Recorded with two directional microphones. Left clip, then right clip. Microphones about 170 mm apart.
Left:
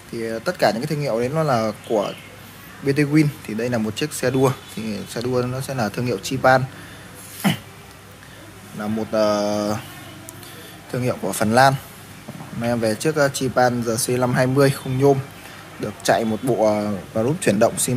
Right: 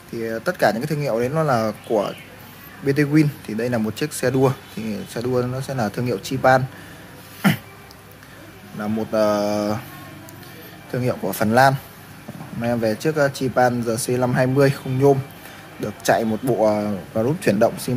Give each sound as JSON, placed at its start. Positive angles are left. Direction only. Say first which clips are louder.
{"t": 0.1, "sound": "speech", "louder": "right 1 dB", "side_deg": -10}
{"t": 7.4, "sound": "a sound", "louder": "right 2 dB", "side_deg": -30}
{"t": 8.7, "sound": "speech", "louder": "even", "side_deg": -10}
{"t": 10.9, "sound": "speech", "louder": "even", "side_deg": -10}